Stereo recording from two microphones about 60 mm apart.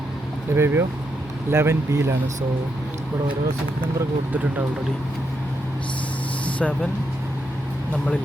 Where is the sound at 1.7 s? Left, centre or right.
Right.